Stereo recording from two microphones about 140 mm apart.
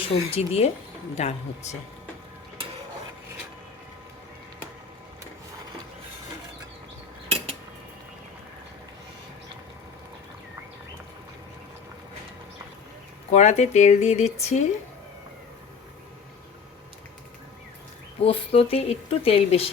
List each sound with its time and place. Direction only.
0.3 s speech: 45° left (ahead or behind)
7.3 s cutlery: 50° right (ahead or behind)
13.3 s speech: 55° left (ahead or behind)
18.2 s speech: 45° left (ahead or behind)